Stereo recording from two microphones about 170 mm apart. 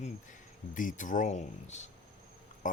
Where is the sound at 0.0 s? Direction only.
50° left (ahead or behind).